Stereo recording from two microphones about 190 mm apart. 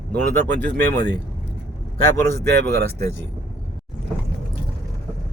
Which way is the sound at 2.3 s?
60° right (ahead or behind).